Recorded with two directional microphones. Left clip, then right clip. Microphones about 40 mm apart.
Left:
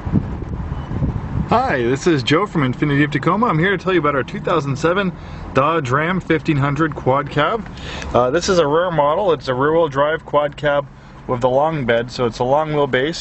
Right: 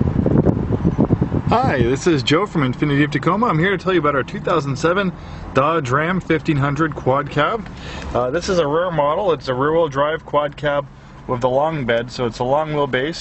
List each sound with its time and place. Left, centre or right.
1.5 s speech: centre
8.1 s speech: left
8.9 s speech: centre
12.8 s speech: left